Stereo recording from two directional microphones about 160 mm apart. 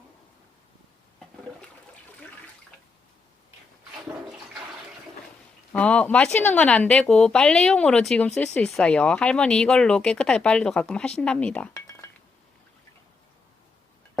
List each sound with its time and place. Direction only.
5.7 s speech: 5° left (ahead or behind)
11.7 s cutlery: 20° left (ahead or behind)